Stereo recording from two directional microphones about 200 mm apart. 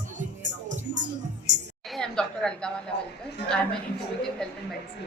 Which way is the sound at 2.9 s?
55° left (ahead or behind).